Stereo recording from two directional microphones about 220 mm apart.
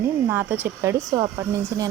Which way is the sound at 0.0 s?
10° right (ahead or behind).